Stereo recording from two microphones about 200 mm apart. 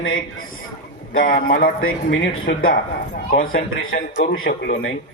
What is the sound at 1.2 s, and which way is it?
Speech, 45° left (ahead or behind).